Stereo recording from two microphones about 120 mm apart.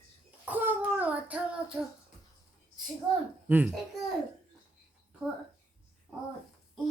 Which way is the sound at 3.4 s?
15° right (ahead or behind).